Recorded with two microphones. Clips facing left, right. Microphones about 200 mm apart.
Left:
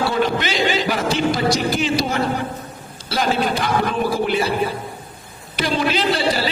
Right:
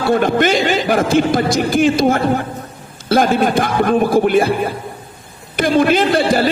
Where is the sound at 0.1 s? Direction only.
50° right (ahead or behind).